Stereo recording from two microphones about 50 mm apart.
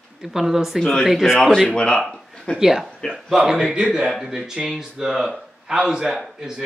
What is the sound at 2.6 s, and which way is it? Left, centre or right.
A man's voice, centre.